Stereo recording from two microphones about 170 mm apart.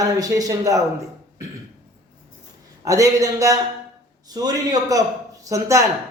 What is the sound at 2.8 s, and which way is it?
Speech, 20° right (ahead or behind).